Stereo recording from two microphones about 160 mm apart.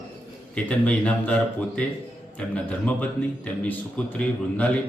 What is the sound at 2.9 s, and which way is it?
A man's voice, 10° left (ahead or behind).